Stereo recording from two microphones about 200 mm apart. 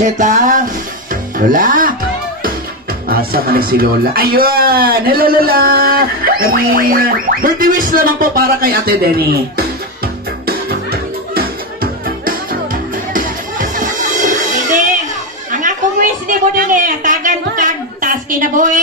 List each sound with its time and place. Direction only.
0.0 s music: 40° right (ahead or behind)
1.5 s speech: 45° right (ahead or behind)
3.1 s speech: 45° right (ahead or behind)
10.4 s music: 50° right (ahead or behind)
15.5 s a sound: 40° right (ahead or behind)